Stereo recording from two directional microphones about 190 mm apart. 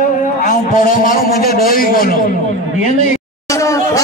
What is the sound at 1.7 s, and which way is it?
Speech, 50° left (ahead or behind).